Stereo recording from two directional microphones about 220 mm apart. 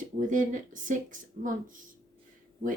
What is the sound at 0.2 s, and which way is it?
Speech, 35° right (ahead or behind).